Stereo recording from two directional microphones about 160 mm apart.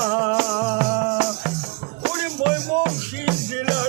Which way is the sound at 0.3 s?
15° right (ahead or behind).